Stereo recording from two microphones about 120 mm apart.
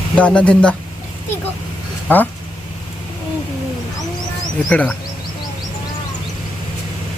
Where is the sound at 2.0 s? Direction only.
15° left (ahead or behind).